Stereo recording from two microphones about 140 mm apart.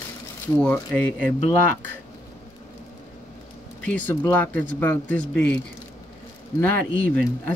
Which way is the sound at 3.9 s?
10° left (ahead or behind).